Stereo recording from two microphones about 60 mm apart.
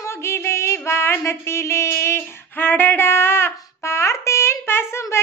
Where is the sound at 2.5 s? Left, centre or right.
Left.